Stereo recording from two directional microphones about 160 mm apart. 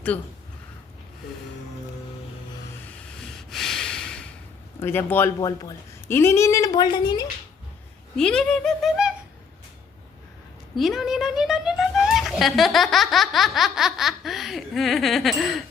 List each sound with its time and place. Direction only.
0.1 s speech: 10° left (ahead or behind)
3.2 s snort: centre (ahead or behind)
4.8 s a woman's voice: 15° left (ahead or behind)
8.1 s a woman's voice: 5° left (ahead or behind)
10.8 s a woman's voice: centre (ahead or behind)